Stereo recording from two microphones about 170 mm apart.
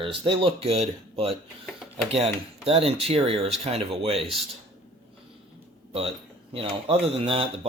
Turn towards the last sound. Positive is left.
turn(degrees=-35)  # may be behind; listen again after turning